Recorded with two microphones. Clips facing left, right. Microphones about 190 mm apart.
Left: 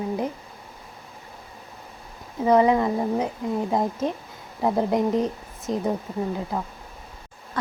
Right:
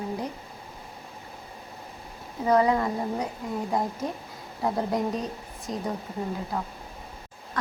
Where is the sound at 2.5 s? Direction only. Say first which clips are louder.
Left 4 dB; 20° left (ahead or behind).